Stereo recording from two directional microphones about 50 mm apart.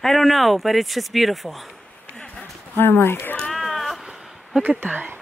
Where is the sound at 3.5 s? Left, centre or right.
Centre.